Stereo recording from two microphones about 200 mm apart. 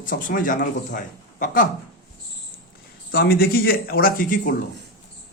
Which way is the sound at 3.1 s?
50° left (ahead or behind).